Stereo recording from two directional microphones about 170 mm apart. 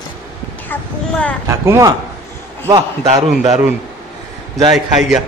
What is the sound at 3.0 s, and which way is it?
Speech, 40° right (ahead or behind).